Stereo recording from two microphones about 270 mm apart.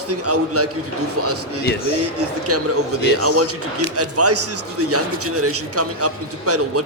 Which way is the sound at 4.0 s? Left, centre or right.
Right.